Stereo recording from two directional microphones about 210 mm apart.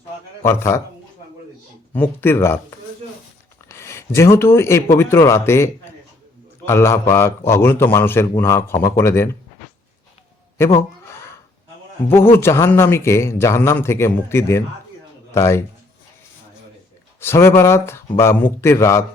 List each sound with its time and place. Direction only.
0.4 s a man's voice: 15° left (ahead or behind)
1.9 s a man's voice: 10° left (ahead or behind)
12.1 s a man's voice: 10° left (ahead or behind)
17.2 s a man's voice: 10° left (ahead or behind)